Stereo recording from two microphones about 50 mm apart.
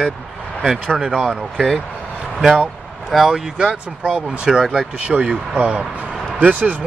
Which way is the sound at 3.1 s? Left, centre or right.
Centre.